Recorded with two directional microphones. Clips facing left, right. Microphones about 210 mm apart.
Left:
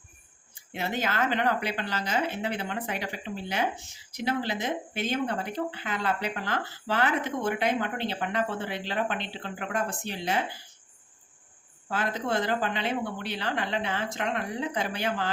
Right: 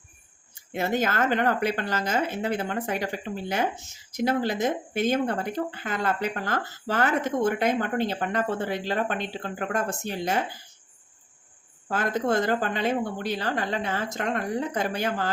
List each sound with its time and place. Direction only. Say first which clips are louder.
0.7 s speech: right 5 dB; 45° right (ahead or behind)
11.9 s speech: right 4 dB; 45° right (ahead or behind)